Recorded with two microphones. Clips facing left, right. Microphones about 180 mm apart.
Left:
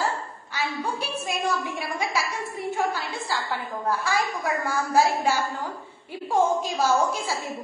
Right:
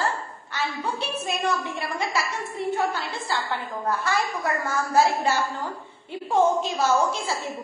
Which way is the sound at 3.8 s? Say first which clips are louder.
Even; 10° left (ahead or behind).